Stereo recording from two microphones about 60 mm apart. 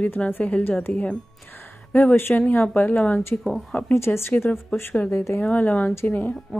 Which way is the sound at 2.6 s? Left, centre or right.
Left.